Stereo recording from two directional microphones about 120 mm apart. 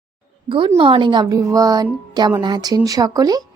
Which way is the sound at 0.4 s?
45° right (ahead or behind).